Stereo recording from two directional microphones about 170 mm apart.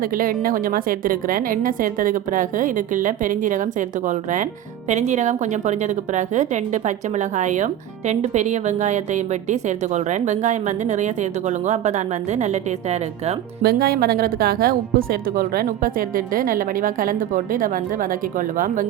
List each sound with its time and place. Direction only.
0.0 s a woman's voice: 55° right (ahead or behind)
13.6 s a woman's voice: 65° right (ahead or behind)